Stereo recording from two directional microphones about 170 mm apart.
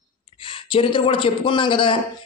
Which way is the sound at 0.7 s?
30° left (ahead or behind).